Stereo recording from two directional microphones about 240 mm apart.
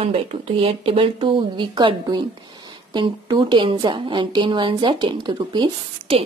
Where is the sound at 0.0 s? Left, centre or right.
Right.